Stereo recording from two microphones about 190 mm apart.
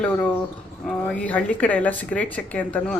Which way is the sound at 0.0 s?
10° left (ahead or behind).